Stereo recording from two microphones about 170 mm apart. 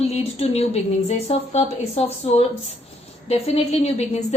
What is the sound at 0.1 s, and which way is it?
A woman's voice, 35° left (ahead or behind).